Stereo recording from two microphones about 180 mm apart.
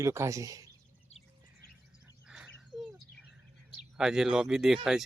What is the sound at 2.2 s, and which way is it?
Bird, 5° right (ahead or behind).